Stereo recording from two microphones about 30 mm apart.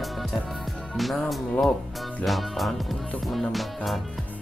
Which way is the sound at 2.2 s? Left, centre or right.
Centre.